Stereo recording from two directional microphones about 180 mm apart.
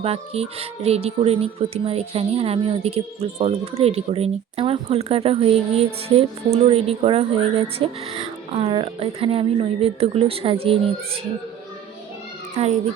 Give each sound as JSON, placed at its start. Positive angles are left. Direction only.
{"t": 0.0, "sound": "speech", "side_deg": -35}
{"t": 12.5, "sound": "speech", "side_deg": -35}